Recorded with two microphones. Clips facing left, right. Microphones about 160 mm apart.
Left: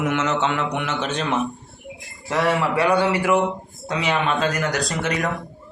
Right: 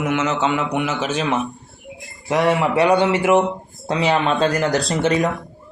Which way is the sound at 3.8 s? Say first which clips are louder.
Right 4 dB; 35° right (ahead or behind).